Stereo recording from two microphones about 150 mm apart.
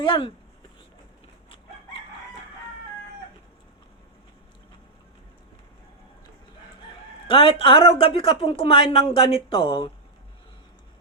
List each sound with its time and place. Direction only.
0.0 s speech: 35° left (ahead or behind)
7.3 s speech: 35° left (ahead or behind)